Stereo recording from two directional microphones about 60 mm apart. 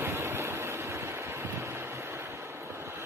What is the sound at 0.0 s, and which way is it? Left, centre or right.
Vehicle, right.